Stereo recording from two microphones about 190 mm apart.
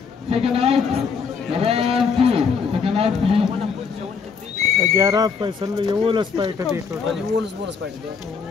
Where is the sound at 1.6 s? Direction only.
30° right (ahead or behind).